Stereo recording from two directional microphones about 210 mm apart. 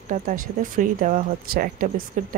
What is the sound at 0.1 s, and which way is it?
Speech, 40° right (ahead or behind).